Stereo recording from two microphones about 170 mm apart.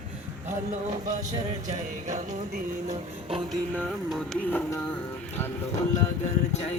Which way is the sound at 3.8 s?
Centre (ahead or behind).